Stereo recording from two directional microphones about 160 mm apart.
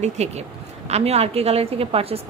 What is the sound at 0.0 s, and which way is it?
A woman's voice, 45° right (ahead or behind).